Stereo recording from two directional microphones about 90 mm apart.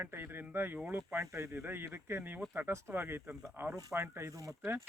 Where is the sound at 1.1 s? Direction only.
30° right (ahead or behind).